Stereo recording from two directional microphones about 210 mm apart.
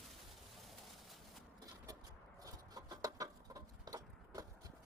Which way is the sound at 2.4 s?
15° right (ahead or behind).